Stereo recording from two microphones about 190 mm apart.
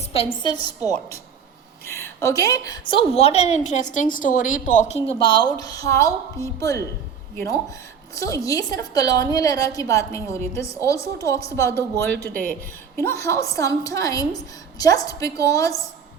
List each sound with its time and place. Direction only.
0.4 s a woman's voice: 20° left (ahead or behind)
2.9 s a woman's voice: 30° left (ahead or behind)